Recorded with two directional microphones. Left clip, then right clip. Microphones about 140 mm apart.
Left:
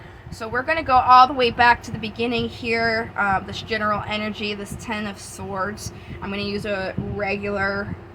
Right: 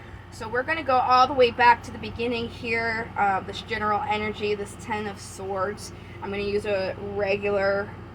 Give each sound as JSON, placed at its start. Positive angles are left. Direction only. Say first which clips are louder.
{"t": 0.3, "sound": "speech", "louder": "left 4 dB", "side_deg": 45}
{"t": 6.2, "sound": "speech", "louder": "even", "side_deg": 45}